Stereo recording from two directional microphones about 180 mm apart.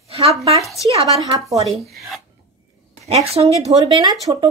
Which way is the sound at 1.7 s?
Centre (ahead or behind).